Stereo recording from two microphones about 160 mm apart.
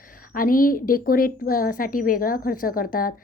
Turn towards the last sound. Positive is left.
turn(degrees=60)  # may be behind; listen again after turning